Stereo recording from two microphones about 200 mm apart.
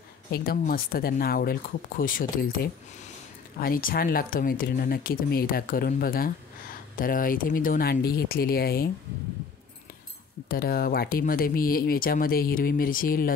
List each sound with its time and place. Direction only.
0.3 s speech: 50° left (ahead or behind)
10.5 s speech: 50° left (ahead or behind)